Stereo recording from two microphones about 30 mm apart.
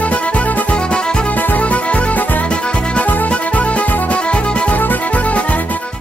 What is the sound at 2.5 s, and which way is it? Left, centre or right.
Music, left.